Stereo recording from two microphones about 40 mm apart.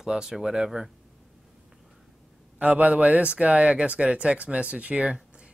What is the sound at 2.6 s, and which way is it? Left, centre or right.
Speech, right.